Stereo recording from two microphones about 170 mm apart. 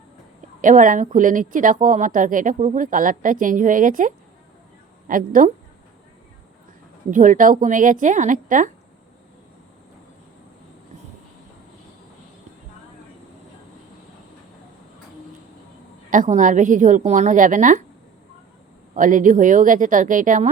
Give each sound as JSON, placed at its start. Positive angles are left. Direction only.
{"t": 0.6, "sound": "a woman's voice", "side_deg": -50}
{"t": 7.1, "sound": "a woman's voice", "side_deg": -50}
{"t": 16.0, "sound": "a woman's voice", "side_deg": -50}
{"t": 18.9, "sound": "a woman's voice", "side_deg": -50}